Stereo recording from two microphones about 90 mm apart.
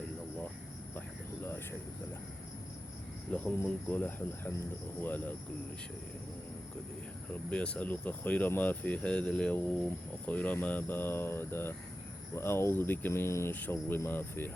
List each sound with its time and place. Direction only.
3.3 s speech: 15° left (ahead or behind)
7.5 s speech: 15° left (ahead or behind)